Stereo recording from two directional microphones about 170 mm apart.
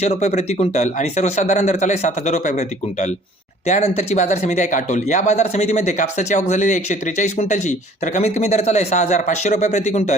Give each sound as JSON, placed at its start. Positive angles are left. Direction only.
{"t": 0.0, "sound": "speech", "side_deg": 40}